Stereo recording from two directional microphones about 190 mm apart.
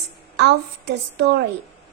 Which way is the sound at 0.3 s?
65° right (ahead or behind).